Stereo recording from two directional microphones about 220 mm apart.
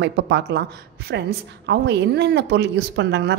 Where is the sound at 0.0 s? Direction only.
50° right (ahead or behind).